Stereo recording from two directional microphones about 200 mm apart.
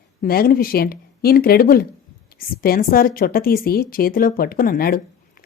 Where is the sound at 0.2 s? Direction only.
50° left (ahead or behind).